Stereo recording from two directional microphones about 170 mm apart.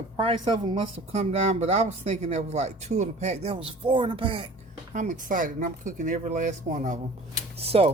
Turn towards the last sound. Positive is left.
turn(degrees=-35)  # may be behind; listen again after turning